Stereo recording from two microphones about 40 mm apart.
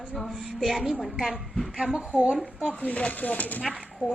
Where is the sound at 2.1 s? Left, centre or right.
Right.